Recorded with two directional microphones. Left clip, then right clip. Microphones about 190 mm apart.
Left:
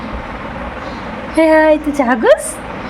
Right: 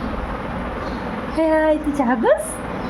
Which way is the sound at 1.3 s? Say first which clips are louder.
Left 8 dB; 20° left (ahead or behind).